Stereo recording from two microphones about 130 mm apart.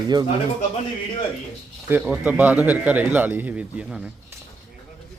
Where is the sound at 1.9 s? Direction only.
10° right (ahead or behind).